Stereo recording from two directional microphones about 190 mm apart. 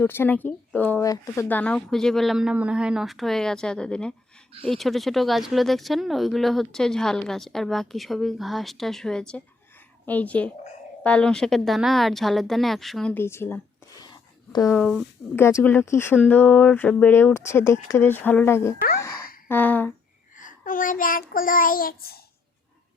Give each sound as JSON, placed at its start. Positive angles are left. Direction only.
{"t": 0.0, "sound": "speech", "side_deg": 10}
{"t": 14.7, "sound": "speech", "side_deg": 0}
{"t": 15.4, "sound": "speech", "side_deg": 15}
{"t": 19.5, "sound": "a sound", "side_deg": 10}
{"t": 20.3, "sound": "child singing", "side_deg": 45}